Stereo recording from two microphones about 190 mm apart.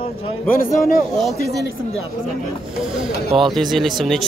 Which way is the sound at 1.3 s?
60° left (ahead or behind).